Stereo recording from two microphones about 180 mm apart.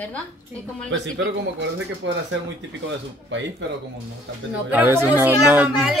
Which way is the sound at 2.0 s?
90° right.